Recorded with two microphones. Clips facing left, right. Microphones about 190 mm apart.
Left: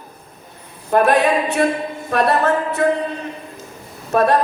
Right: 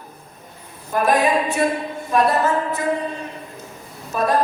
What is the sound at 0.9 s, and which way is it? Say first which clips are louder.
Speech: left 3 dB; 65° left (ahead or behind).